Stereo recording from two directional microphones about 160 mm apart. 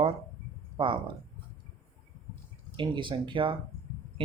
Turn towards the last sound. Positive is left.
turn(degrees=-30)  # may be behind; listen again after turning